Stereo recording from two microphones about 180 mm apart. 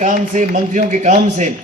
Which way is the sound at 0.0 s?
45° right (ahead or behind).